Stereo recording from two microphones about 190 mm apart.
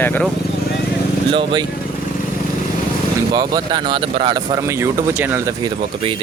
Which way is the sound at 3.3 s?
20° right (ahead or behind).